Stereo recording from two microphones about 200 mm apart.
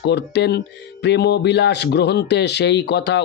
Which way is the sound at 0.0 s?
60° left (ahead or behind).